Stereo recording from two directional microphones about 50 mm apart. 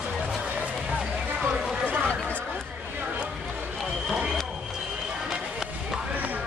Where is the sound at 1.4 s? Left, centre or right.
Right.